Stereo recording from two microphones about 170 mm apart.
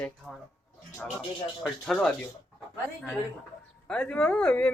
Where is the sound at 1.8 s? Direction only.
5° left (ahead or behind).